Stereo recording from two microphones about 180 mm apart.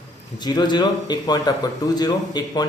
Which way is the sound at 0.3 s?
25° left (ahead or behind).